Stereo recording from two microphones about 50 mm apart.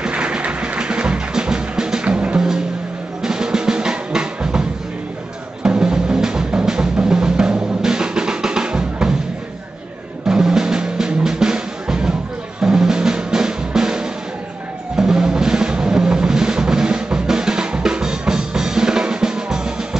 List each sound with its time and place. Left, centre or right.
0.0 s music: centre
10.2 s music: centre
12.6 s drum: centre
15.0 s music: centre
17.1 s drum: centre